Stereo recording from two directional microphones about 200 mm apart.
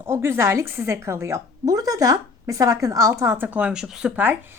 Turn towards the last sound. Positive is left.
turn(degrees=-10)  # may be behind; listen again after turning